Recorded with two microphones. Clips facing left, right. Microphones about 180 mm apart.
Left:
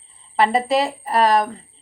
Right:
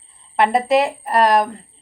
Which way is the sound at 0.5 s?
Centre (ahead or behind).